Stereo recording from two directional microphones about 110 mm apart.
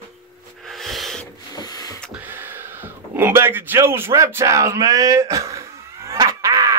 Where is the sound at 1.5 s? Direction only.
35° left (ahead or behind).